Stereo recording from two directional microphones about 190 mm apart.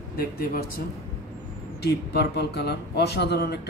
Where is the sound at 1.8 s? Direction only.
60° left (ahead or behind).